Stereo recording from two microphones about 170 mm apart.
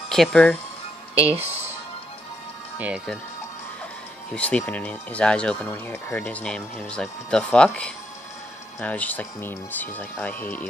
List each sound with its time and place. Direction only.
0.1 s speech: 5° left (ahead or behind)
1.2 s speech: 35° right (ahead or behind)
2.8 s speech: 5° right (ahead or behind)
4.3 s speech: 10° left (ahead or behind)